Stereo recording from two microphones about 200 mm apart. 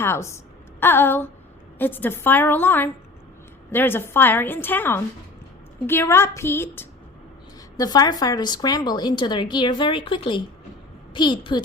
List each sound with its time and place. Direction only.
0.0 s a woman's voice: 15° left (ahead or behind)